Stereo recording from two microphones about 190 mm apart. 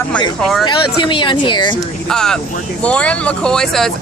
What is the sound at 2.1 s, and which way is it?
Speech, 5° left (ahead or behind).